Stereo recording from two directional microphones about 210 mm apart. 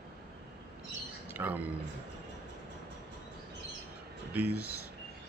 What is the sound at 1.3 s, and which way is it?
Speech, 10° right (ahead or behind).